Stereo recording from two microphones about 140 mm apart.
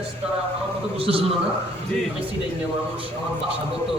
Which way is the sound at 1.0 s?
45° right (ahead or behind).